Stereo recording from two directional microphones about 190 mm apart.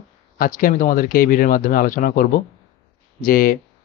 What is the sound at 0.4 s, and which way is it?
Speech, 45° left (ahead or behind).